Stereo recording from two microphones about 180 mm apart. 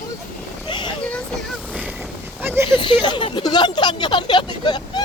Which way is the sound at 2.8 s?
25° left (ahead or behind).